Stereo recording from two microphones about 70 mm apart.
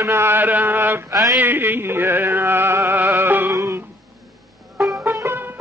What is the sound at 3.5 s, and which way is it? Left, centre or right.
Music, right.